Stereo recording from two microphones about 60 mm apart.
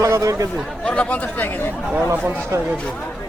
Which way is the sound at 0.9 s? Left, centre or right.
Left.